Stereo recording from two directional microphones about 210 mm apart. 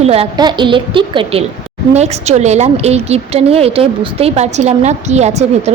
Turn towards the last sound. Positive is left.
turn(degrees=-30)  # may be behind; listen again after turning